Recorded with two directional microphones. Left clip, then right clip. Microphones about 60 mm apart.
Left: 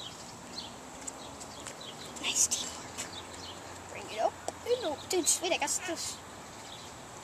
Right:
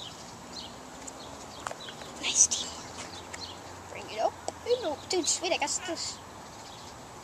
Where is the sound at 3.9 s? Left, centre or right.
Centre.